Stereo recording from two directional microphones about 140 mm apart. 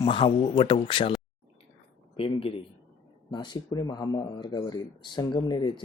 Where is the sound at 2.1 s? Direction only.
40° left (ahead or behind).